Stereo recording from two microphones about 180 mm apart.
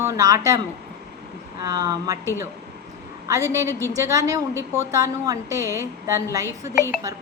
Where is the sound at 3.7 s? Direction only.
15° left (ahead or behind).